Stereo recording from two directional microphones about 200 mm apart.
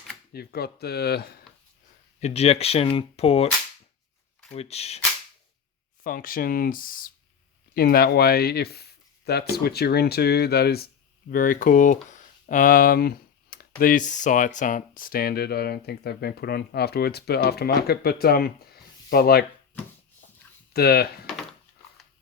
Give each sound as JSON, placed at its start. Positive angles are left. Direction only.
{"t": 0.3, "sound": "speech", "side_deg": 50}
{"t": 2.2, "sound": "speech", "side_deg": 30}
{"t": 4.5, "sound": "speech", "side_deg": 30}
{"t": 6.0, "sound": "speech", "side_deg": 45}
{"t": 20.7, "sound": "speech", "side_deg": 50}